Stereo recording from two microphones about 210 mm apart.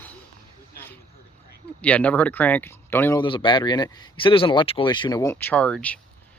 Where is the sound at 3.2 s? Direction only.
20° left (ahead or behind).